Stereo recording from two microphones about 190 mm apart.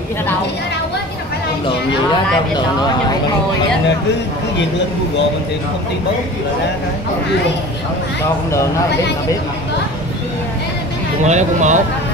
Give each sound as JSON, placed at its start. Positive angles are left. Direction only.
{"t": 11.2, "sound": "speech", "side_deg": -40}